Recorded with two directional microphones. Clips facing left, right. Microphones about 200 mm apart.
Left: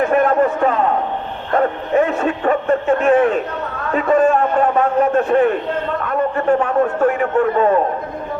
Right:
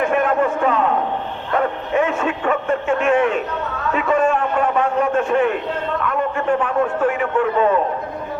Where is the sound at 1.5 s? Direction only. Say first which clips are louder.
Left 3 dB; 40° left (ahead or behind).